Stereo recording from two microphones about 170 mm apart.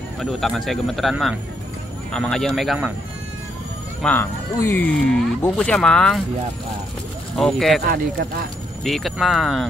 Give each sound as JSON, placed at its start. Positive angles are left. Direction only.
{"t": 0.2, "sound": "speech", "side_deg": 0}
{"t": 4.0, "sound": "speech", "side_deg": 10}
{"t": 7.3, "sound": "speech", "side_deg": 0}
{"t": 7.8, "sound": "speech", "side_deg": -60}
{"t": 8.8, "sound": "speech", "side_deg": 0}